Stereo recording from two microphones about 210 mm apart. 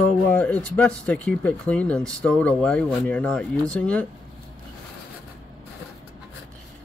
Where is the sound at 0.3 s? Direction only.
5° left (ahead or behind).